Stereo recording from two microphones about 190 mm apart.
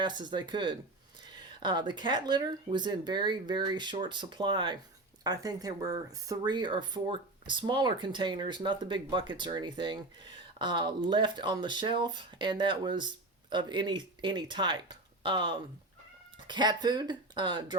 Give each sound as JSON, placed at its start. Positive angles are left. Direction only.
{"t": 0.0, "sound": "speech", "side_deg": -25}